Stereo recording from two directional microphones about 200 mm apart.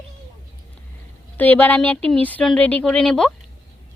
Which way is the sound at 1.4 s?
10° left (ahead or behind).